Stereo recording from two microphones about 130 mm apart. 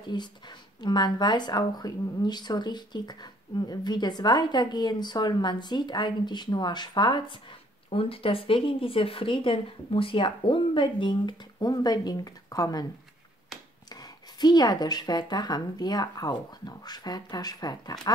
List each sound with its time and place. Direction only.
0.0 s speech: 35° left (ahead or behind)
7.9 s speech: 45° left (ahead or behind); by 12.8 s 30° left (ahead or behind)
14.4 s speech: 30° left (ahead or behind)